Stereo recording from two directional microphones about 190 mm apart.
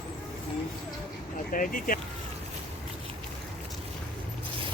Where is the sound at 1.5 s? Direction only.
45° left (ahead or behind).